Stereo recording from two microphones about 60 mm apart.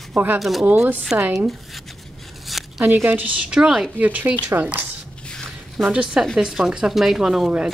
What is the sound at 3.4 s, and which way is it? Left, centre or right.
Speech, centre.